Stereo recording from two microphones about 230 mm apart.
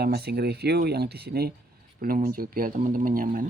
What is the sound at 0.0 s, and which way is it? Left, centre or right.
Speech, right.